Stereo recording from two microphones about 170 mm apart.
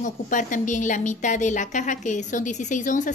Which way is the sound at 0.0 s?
50° left (ahead or behind).